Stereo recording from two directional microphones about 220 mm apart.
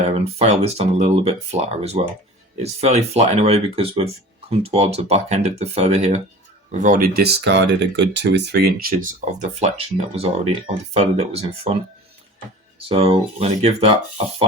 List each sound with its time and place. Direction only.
0.3 s speech: 30° right (ahead or behind)
12.9 s speech: 25° right (ahead or behind)